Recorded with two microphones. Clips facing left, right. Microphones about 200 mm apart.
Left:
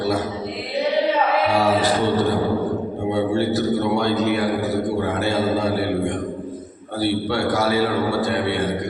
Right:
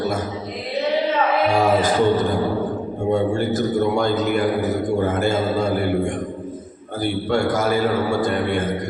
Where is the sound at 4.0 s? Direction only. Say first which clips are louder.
Even; 45° right (ahead or behind).